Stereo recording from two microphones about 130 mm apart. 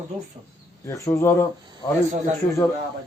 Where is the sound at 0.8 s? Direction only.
20° left (ahead or behind).